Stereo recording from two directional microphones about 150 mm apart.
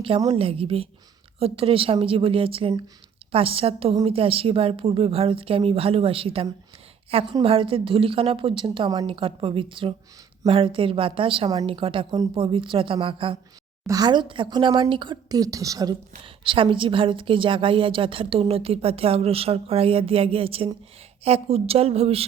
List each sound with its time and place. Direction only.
0.3 s a woman's voice: 40° right (ahead or behind)
13.8 s a woman's voice: 25° right (ahead or behind); by 22.2 s 45° right (ahead or behind)